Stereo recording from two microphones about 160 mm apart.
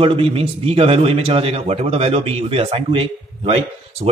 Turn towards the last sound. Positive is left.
turn(degrees=-35)  # may be behind; listen again after turning